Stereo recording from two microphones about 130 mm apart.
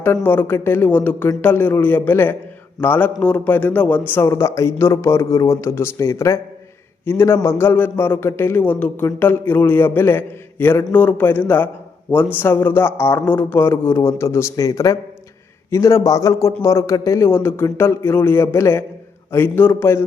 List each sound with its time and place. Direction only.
0.3 s a man's voice: 15° left (ahead or behind)